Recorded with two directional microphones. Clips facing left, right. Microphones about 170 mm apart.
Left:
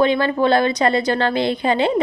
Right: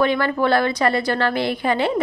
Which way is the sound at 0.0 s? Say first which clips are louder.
Left 2 dB; 20° left (ahead or behind).